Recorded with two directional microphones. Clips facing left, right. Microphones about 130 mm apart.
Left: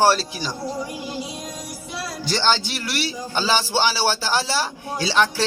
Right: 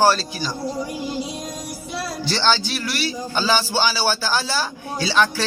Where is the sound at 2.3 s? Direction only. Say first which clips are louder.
Even; 15° left (ahead or behind).